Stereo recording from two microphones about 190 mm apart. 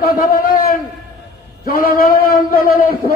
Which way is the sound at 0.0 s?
50° left (ahead or behind).